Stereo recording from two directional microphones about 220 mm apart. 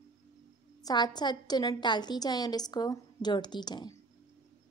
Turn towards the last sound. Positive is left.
turn(degrees=20)  # may be behind; listen again after turning